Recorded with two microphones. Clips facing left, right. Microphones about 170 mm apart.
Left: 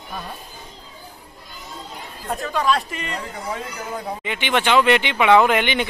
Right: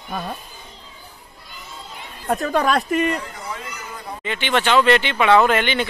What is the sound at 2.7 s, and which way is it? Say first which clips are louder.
Speech: right 5 dB; 50° right (ahead or behind).